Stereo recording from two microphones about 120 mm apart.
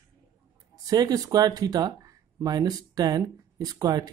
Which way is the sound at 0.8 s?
30° right (ahead or behind).